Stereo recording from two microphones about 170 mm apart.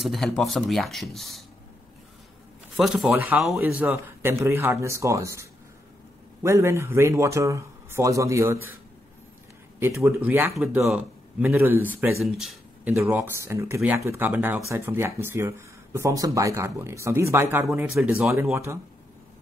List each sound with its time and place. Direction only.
0.0 s speech: centre (ahead or behind)
2.7 s speech: centre (ahead or behind)
9.8 s a man's voice: 15° right (ahead or behind)
12.2 s speech: centre (ahead or behind)
12.9 s speech: 15° right (ahead or behind)